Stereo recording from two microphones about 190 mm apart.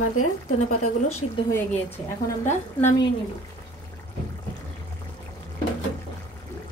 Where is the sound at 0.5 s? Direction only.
40° left (ahead or behind).